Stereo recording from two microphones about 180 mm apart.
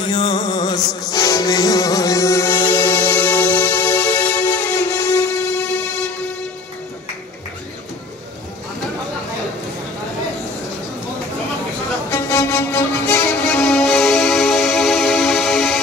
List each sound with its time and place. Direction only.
0.0 s music: 25° left (ahead or behind)
12.1 s music: 15° left (ahead or behind)